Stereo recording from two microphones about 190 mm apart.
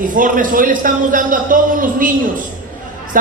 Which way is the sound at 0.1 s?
45° right (ahead or behind).